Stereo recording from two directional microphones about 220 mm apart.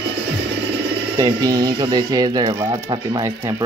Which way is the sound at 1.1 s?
15° right (ahead or behind).